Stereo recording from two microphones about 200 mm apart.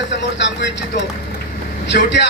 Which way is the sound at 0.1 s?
60° left (ahead or behind).